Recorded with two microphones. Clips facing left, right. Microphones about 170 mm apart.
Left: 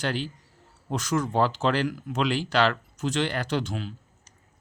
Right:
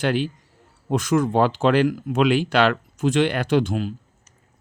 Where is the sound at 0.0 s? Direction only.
60° right (ahead or behind).